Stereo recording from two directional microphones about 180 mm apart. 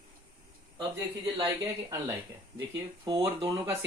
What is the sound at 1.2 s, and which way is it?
Speech, 20° right (ahead or behind).